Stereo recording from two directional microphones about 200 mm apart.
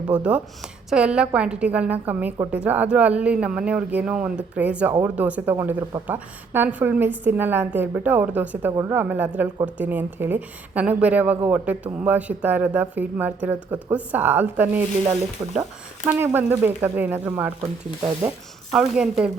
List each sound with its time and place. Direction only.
0.1 s a woman's voice: 5° right (ahead or behind)
16.0 s a woman's voice: 10° right (ahead or behind)
18.7 s a woman's voice: 5° right (ahead or behind)